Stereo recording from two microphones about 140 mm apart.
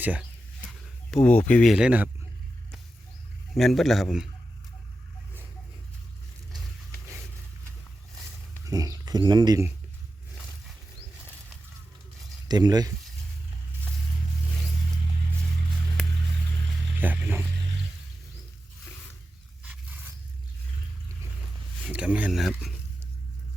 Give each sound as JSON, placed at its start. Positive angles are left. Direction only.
{"t": 0.0, "sound": "speech", "side_deg": -10}
{"t": 1.1, "sound": "speech", "side_deg": 10}
{"t": 1.7, "sound": "speech", "side_deg": -10}
{"t": 3.5, "sound": "a man's voice", "side_deg": 0}
{"t": 8.6, "sound": "speech", "side_deg": -25}
{"t": 12.5, "sound": "speech", "side_deg": -30}
{"t": 17.0, "sound": "a sound", "side_deg": -15}
{"t": 21.8, "sound": "a sound", "side_deg": -10}